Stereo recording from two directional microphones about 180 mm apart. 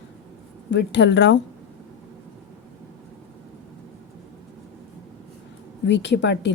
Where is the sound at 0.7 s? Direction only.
80° left.